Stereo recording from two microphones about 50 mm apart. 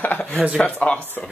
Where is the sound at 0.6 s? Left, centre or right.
Left.